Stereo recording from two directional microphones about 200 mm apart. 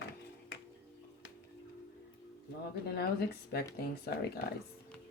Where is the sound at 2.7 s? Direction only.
50° left (ahead or behind).